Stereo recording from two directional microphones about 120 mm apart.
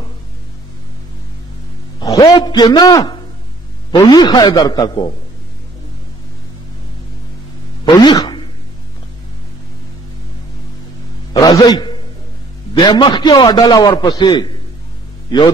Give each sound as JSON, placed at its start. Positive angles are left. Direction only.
{"t": 2.0, "sound": "a man's voice", "side_deg": 30}
{"t": 7.8, "sound": "a sound", "side_deg": 35}
{"t": 11.3, "sound": "a man's voice", "side_deg": 35}